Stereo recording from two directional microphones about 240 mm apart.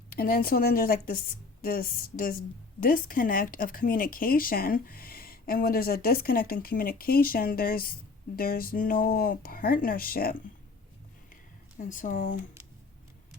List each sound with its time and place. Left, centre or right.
0.1 s speech: left
11.8 s speech: left